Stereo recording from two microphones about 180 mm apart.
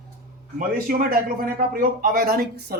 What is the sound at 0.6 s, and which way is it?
Speech, 50° right (ahead or behind).